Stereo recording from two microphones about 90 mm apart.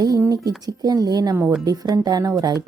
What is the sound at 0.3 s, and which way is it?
A woman's voice, 45° right (ahead or behind).